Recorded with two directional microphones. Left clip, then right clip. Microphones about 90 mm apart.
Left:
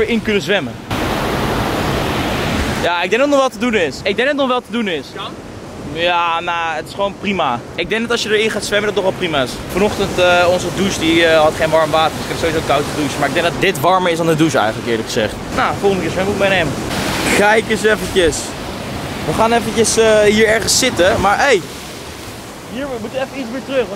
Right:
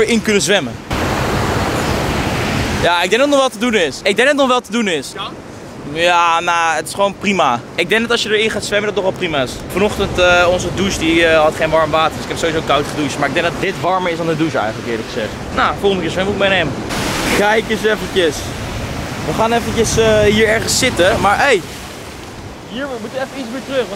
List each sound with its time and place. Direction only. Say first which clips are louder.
0.0 s speech: right 2 dB; 30° right (ahead or behind)
1.0 s waves: right 1 dB; 5° right (ahead or behind)
2.8 s speech: right 4 dB; 35° right (ahead or behind)
3.1 s speech: right 1 dB; 15° right (ahead or behind)
4.0 s speech: right 3 dB; 40° right (ahead or behind)
8.1 s speech: right 1 dB; centre (ahead or behind)
13.6 s speech: left 3 dB; 35° left (ahead or behind)
13.9 s speech: left 3 dB; 25° left (ahead or behind)
15.5 s speech: right 2 dB; 5° right (ahead or behind)